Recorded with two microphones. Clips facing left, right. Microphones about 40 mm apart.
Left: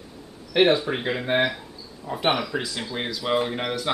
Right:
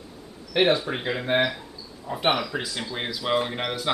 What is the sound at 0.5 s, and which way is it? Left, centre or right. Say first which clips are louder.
Speech: left 2 dB; centre.